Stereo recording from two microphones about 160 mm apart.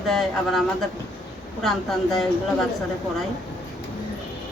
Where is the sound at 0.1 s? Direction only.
Centre (ahead or behind).